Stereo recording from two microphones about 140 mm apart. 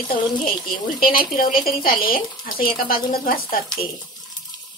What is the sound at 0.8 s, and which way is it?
Speech, 90° left.